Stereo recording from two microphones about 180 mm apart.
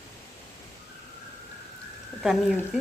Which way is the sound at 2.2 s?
Centre (ahead or behind).